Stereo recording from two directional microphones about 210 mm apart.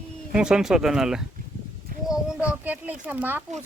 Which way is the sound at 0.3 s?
5° right (ahead or behind).